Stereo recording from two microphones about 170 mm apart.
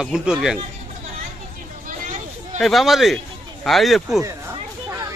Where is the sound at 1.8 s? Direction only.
45° right (ahead or behind).